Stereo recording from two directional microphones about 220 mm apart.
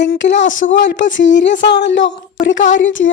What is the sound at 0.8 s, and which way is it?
A woman's voice, 55° left (ahead or behind).